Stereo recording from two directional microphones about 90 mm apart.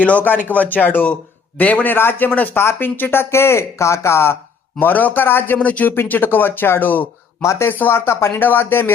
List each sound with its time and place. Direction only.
0.0 s speech: 15° left (ahead or behind)